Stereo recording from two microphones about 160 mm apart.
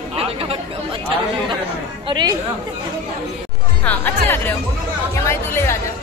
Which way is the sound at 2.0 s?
30° right (ahead or behind).